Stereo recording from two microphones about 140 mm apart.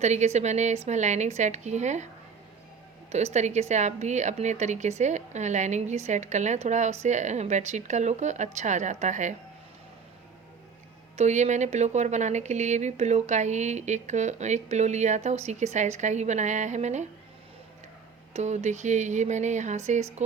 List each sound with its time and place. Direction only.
0.0 s a woman's voice: 55° right (ahead or behind)
3.3 s a woman's voice: 55° right (ahead or behind)
11.2 s a woman's voice: 55° right (ahead or behind)
18.3 s a woman's voice: 55° right (ahead or behind)